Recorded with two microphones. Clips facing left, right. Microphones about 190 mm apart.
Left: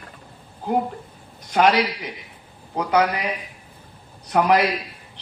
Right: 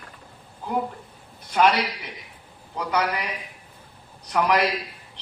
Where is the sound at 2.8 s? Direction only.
50° left (ahead or behind).